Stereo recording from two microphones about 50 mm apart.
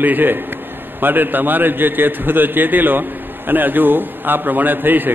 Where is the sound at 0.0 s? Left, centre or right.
Right.